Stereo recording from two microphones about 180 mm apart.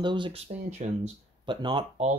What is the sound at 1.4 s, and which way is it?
Speech, 25° right (ahead or behind).